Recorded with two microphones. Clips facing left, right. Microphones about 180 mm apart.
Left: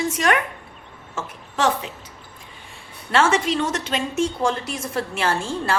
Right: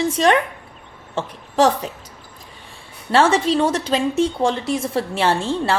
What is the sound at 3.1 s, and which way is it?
A woman's voice, 30° right (ahead or behind).